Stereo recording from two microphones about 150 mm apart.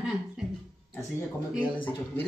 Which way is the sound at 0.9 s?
15° left (ahead or behind).